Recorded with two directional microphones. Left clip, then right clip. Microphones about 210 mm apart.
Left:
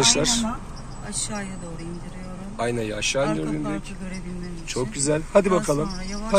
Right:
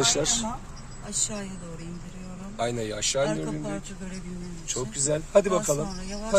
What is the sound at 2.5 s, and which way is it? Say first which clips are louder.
Speech: left 3 dB; 10° right (ahead or behind).